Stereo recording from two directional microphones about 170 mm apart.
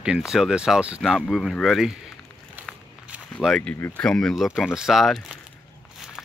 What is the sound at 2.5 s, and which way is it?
Walk, 5° right (ahead or behind).